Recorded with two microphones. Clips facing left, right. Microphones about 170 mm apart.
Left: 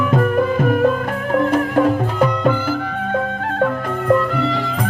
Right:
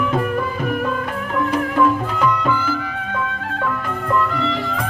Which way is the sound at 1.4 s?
50° left (ahead or behind).